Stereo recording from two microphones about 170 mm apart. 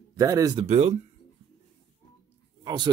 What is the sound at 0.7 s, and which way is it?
Speech, 40° right (ahead or behind).